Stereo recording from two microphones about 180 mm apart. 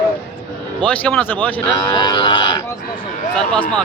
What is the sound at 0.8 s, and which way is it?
Speech, 10° left (ahead or behind).